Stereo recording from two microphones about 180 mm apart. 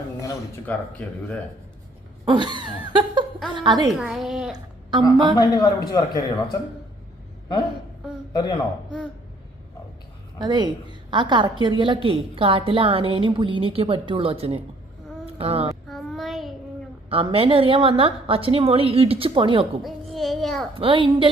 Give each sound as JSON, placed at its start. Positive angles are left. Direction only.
{"t": 0.2, "sound": "speech", "side_deg": 15}
{"t": 2.2, "sound": "a sound", "side_deg": -25}
{"t": 3.5, "sound": "a woman's voice", "side_deg": -25}
{"t": 3.8, "sound": "a woman's voice", "side_deg": 0}
{"t": 4.5, "sound": "a sound", "side_deg": -25}
{"t": 5.4, "sound": "a man's voice", "side_deg": 20}
{"t": 8.3, "sound": "a man's voice", "side_deg": 25}
{"t": 10.3, "sound": "a woman's voice", "side_deg": -25}
{"t": 15.9, "sound": "child singing", "side_deg": 0}
{"t": 17.1, "sound": "a woman's voice", "side_deg": -30}
{"t": 19.8, "sound": "a sound", "side_deg": 0}
{"t": 20.7, "sound": "a woman's voice", "side_deg": -30}